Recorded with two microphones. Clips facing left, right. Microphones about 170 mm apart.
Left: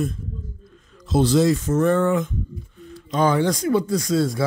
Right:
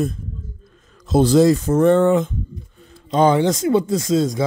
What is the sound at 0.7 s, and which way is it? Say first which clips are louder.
Speech: right 4 dB; 45° right (ahead or behind).